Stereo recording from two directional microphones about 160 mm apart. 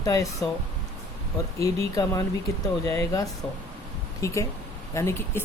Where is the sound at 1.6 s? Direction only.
20° left (ahead or behind).